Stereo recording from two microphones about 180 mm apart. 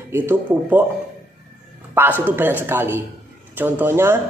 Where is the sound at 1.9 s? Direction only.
10° right (ahead or behind).